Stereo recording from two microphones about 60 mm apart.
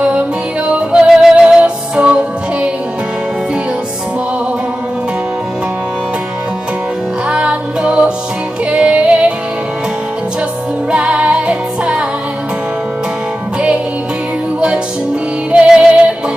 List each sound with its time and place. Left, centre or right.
0.7 s music: centre
7.2 s music: centre
10.9 s music: centre
15.5 s music: centre